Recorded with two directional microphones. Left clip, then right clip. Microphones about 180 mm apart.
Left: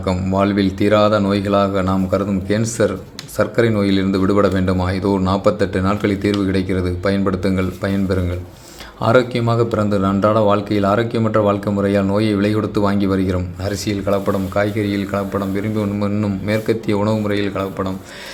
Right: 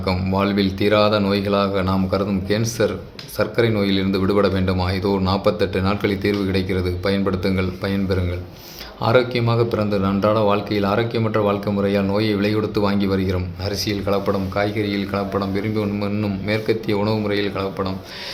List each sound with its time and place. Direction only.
0.0 s a man's voice: 20° left (ahead or behind)